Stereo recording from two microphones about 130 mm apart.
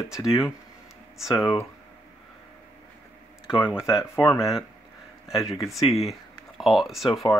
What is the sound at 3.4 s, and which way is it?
Speech, 35° left (ahead or behind).